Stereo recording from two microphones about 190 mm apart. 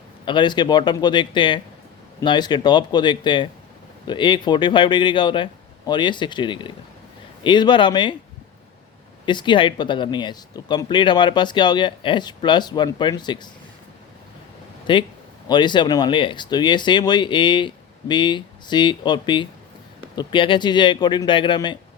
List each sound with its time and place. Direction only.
0.3 s speech: 25° left (ahead or behind)
9.2 s speech: 25° left (ahead or behind)
14.9 s speech: 25° left (ahead or behind)